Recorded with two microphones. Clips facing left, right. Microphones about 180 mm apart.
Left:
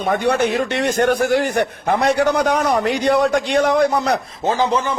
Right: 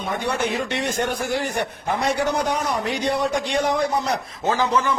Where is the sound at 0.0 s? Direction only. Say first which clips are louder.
Left 7 dB; 65° left (ahead or behind).